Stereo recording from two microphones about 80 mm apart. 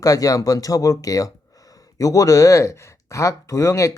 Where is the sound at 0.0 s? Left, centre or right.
Left.